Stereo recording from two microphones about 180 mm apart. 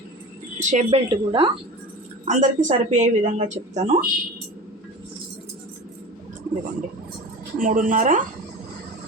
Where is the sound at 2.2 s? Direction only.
40° right (ahead or behind).